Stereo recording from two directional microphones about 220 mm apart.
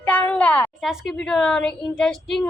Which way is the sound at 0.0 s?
5° left (ahead or behind).